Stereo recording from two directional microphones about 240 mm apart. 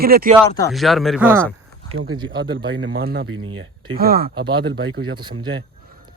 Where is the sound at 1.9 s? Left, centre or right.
Right.